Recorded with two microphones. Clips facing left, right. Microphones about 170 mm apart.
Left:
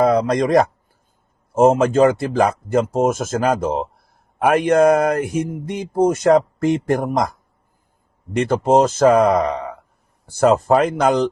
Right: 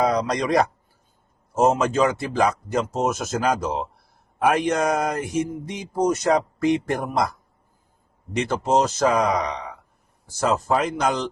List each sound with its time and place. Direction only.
0.0 s speech: 50° left (ahead or behind)
8.4 s speech: 50° left (ahead or behind)